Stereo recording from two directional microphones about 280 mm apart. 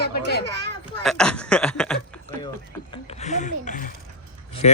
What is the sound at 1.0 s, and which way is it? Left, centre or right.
A woman's voice, centre.